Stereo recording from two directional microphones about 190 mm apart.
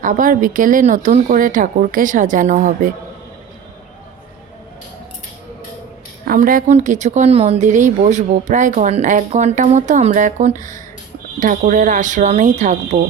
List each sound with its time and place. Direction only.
0.0 s speech: 45° right (ahead or behind)
6.2 s a woman's voice: 45° right (ahead or behind)
12.9 s speech: 30° right (ahead or behind)